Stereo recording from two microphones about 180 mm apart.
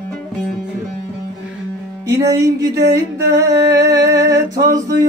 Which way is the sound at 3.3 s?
20° right (ahead or behind).